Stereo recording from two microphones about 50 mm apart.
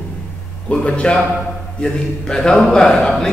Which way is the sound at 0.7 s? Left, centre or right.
Left.